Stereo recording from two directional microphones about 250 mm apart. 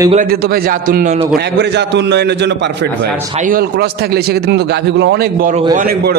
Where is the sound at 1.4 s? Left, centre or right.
Right.